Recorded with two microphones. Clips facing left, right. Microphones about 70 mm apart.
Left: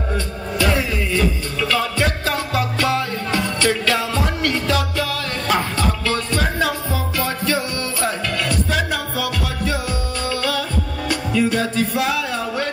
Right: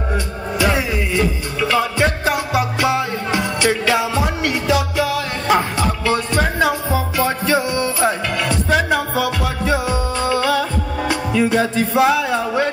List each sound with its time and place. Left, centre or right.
0.1 s music: centre